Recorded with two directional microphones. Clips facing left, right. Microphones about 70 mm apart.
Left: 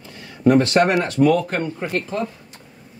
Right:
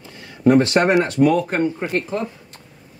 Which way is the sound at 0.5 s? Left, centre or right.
Right.